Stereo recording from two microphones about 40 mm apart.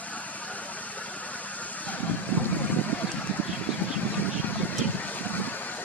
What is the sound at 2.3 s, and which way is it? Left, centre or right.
Vehicle, left.